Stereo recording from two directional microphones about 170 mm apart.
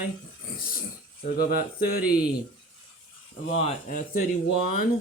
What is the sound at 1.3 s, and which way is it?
Speech, 60° left (ahead or behind).